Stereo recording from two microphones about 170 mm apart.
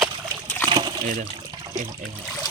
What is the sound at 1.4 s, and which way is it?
Water, 25° right (ahead or behind).